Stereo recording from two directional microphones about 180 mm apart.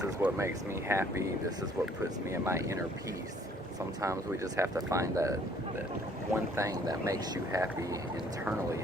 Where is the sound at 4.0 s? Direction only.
15° right (ahead or behind).